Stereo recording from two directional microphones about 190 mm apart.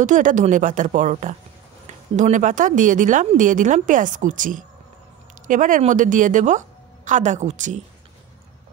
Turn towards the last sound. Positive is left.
turn(degrees=-40)  # may be behind; listen again after turning